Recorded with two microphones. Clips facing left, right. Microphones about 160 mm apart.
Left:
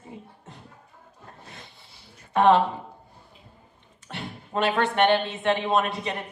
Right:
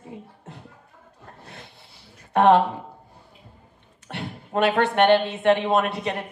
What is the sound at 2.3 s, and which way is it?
Speech, 60° right (ahead or behind).